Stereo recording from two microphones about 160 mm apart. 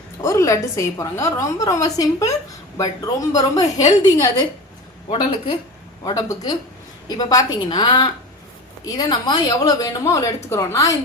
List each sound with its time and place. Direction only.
0.2 s a woman's voice: 20° left (ahead or behind); by 5.5 s 35° left (ahead or behind)
6.1 s a woman's voice: 25° left (ahead or behind)